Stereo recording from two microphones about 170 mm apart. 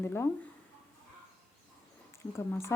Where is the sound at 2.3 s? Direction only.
15° left (ahead or behind).